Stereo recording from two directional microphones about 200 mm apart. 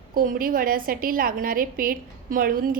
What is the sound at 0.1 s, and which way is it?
A woman's voice, 45° right (ahead or behind).